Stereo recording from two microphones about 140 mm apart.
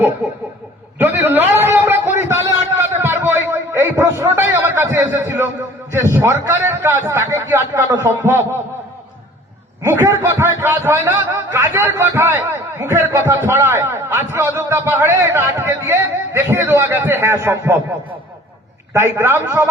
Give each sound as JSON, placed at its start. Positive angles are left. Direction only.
{"t": 1.1, "sound": "a sound", "side_deg": -15}
{"t": 5.9, "sound": "a man's voice", "side_deg": -20}
{"t": 9.8, "sound": "a man's voice", "side_deg": -15}
{"t": 18.9, "sound": "a man's voice", "side_deg": -15}